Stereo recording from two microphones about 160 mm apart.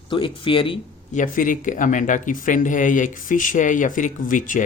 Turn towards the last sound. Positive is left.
turn(degrees=55)  # may be behind; listen again after turning